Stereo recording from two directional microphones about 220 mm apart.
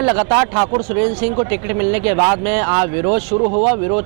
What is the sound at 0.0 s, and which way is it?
Speech, 20° right (ahead or behind).